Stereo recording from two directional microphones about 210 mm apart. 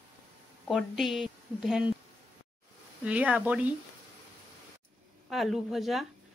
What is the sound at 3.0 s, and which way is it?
Speech, 5° right (ahead or behind).